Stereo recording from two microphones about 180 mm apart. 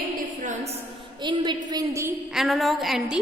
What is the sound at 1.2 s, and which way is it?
Speech, 25° right (ahead or behind).